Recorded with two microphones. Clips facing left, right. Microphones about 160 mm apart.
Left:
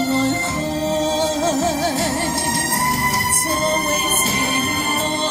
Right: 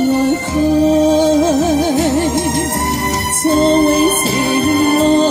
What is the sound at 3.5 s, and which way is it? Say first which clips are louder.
Music: right 12 dB; 25° right (ahead or behind).